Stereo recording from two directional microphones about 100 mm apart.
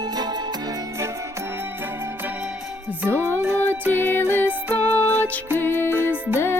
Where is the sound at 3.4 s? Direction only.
25° right (ahead or behind).